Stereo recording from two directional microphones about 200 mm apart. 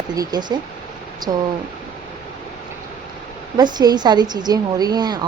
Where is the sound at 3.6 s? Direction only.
20° right (ahead or behind).